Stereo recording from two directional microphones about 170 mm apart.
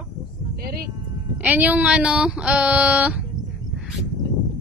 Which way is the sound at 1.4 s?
10° right (ahead or behind).